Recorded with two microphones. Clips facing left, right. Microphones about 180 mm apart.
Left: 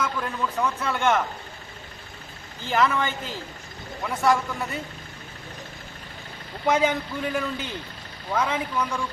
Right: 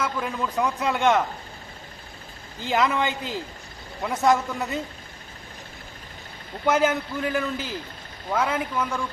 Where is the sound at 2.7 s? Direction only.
15° right (ahead or behind).